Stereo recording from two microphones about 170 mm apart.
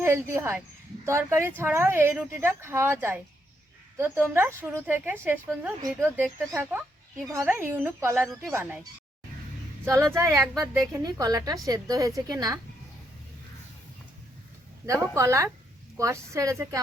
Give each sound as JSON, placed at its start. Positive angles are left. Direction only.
{"t": 0.0, "sound": "a woman's voice", "side_deg": -15}
{"t": 15.1, "sound": "a woman's voice", "side_deg": -15}